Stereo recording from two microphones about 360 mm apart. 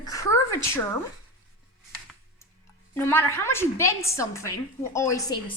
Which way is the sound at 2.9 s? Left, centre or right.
Centre.